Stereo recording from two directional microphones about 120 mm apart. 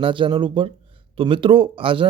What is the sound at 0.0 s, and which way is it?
Speech, 45° right (ahead or behind).